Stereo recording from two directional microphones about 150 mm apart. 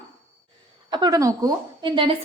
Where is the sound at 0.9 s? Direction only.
25° right (ahead or behind).